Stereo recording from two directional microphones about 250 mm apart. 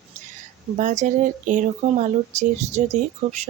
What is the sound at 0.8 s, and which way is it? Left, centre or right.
Speech, right.